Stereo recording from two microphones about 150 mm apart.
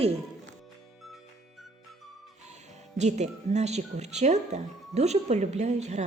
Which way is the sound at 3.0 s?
50° right (ahead or behind).